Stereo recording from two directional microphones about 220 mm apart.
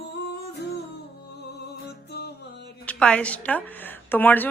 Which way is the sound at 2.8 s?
5° left (ahead or behind).